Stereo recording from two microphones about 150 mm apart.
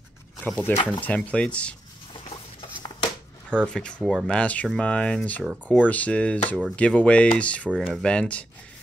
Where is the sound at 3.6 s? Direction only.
5° left (ahead or behind).